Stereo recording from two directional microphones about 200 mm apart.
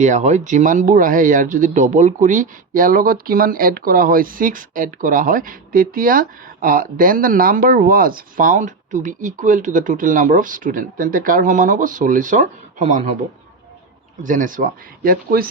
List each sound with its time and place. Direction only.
0.0 s speech: 35° right (ahead or behind)
14.3 s speech: 40° right (ahead or behind)